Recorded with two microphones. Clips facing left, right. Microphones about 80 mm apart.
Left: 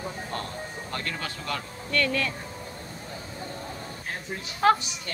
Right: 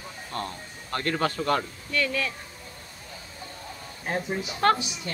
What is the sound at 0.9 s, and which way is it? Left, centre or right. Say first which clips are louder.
Speech: right 9 dB; right.